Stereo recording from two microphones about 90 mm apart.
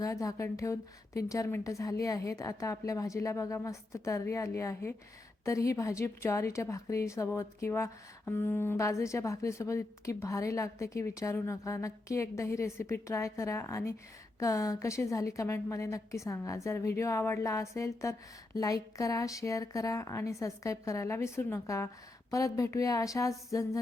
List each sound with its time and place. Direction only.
0.0 s a woman's voice: 40° left (ahead or behind)